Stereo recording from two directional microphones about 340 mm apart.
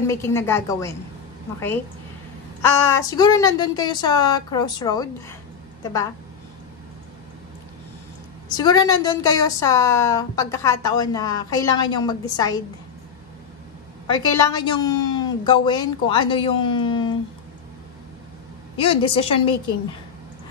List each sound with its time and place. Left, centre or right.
0.0 s a woman's voice: centre
2.6 s a woman's voice: centre
8.5 s a woman's voice: centre
14.0 s a woman's voice: centre
18.8 s a woman's voice: centre